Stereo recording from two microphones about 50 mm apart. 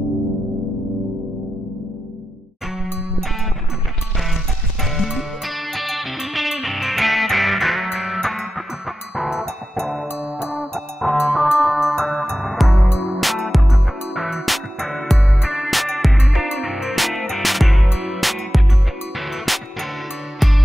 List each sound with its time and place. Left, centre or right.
5.7 s music: centre
11.1 s music: centre
12.0 s music: centre
12.8 s music: right
13.2 s music: centre